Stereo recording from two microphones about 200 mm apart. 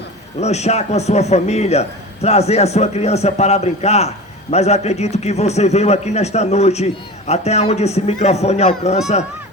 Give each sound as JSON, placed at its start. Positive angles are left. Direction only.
{"t": 0.3, "sound": "a man's voice", "side_deg": 35}